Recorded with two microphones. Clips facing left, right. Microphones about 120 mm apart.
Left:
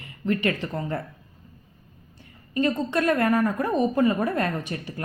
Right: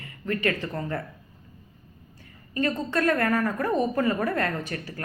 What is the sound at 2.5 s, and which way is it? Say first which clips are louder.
A woman's voice: left 2 dB; 20° left (ahead or behind).